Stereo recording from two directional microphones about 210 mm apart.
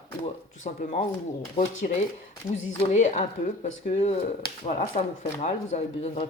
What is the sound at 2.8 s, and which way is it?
Speech, 35° left (ahead or behind).